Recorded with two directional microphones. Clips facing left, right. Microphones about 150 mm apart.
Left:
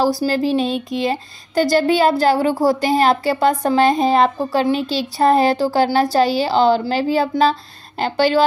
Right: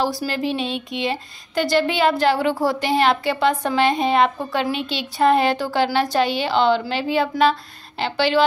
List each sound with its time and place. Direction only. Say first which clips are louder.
0.2 s a woman's voice: left 6 dB; 35° left (ahead or behind)